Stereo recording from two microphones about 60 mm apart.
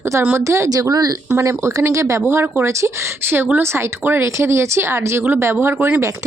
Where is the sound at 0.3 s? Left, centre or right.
Right.